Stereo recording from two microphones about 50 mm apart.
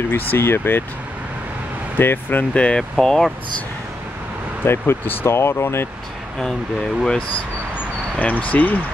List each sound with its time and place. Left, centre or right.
0.1 s speech: left
2.0 s speech: left
2.5 s speech: left
3.0 s speech: centre
4.6 s speech: left
8.2 s speech: left